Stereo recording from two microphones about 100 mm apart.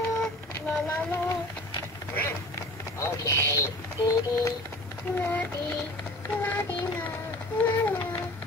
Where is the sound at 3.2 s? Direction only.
35° left (ahead or behind).